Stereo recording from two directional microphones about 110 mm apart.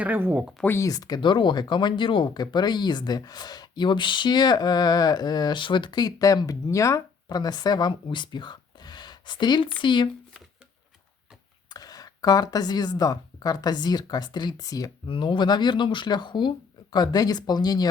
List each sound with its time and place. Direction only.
0.0 s speech: 15° right (ahead or behind)
0.8 s speech: 35° left (ahead or behind)
8.1 s a sound: 45° left (ahead or behind)
9.8 s speech: 45° left (ahead or behind)
11.7 s speech: 35° left (ahead or behind)
15.0 s speech: 50° left (ahead or behind)